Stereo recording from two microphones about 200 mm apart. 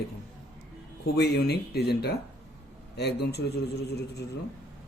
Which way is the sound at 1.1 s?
55° left (ahead or behind).